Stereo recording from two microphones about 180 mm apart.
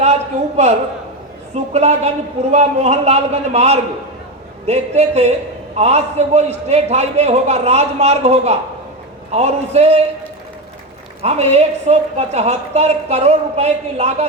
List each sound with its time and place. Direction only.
0.0 s a man's voice: 40° right (ahead or behind)
11.2 s a woman's voice: 35° right (ahead or behind)